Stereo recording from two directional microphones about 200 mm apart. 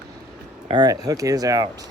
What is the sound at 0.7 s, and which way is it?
Speech, 20° right (ahead or behind).